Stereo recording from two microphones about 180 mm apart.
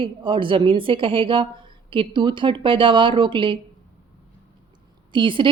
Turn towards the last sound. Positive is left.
turn(degrees=-25)  # may be behind; listen again after turning